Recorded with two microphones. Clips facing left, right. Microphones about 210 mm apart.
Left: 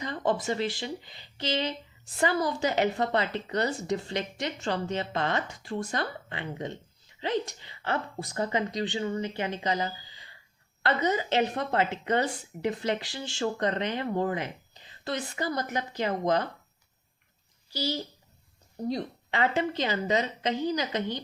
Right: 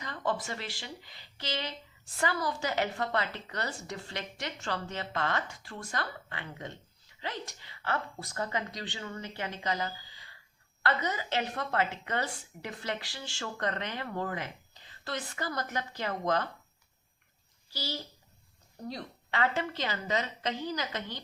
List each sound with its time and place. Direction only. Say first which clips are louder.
0.0 s a woman's voice: left 5 dB; 20° left (ahead or behind)
17.7 s a woman's voice: left 7 dB; 20° left (ahead or behind)